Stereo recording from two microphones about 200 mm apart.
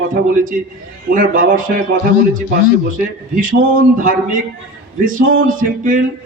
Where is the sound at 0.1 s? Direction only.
40° right (ahead or behind).